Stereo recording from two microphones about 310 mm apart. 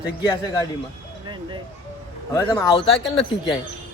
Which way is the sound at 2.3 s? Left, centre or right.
Centre.